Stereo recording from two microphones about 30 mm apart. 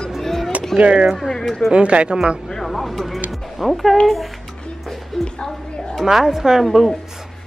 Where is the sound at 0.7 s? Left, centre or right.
Right.